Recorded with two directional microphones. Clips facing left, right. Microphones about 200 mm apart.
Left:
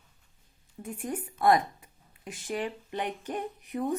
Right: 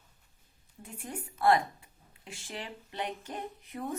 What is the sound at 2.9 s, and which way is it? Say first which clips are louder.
Speech: left 1 dB; 15° left (ahead or behind).